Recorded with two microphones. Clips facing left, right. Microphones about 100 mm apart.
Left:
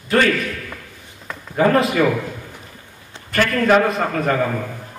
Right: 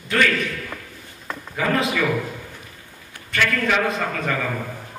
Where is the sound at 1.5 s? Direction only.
40° left (ahead or behind).